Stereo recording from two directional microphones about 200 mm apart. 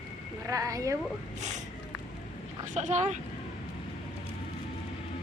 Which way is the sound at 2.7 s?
35° right (ahead or behind).